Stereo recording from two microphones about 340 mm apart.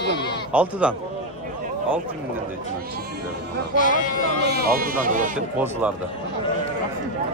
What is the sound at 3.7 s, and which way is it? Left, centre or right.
Speech, left.